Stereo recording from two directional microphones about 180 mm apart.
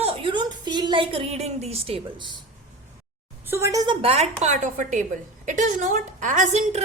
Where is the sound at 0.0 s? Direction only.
25° right (ahead or behind).